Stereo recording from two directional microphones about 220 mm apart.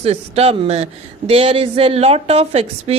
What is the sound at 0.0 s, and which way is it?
A woman's voice, 25° right (ahead or behind).